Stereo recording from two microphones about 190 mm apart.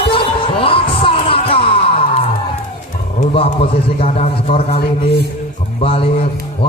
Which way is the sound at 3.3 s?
30° left (ahead or behind).